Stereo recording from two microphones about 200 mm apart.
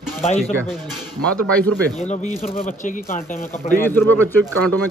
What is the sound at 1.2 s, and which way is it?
Speech, 5° left (ahead or behind).